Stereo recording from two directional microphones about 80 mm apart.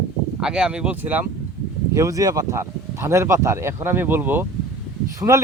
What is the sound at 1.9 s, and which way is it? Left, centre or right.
Speech, right.